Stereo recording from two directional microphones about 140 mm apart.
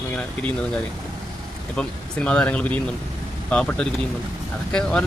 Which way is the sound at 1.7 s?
5° left (ahead or behind).